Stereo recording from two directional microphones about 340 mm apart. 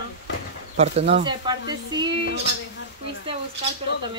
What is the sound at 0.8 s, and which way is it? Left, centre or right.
Speech, centre.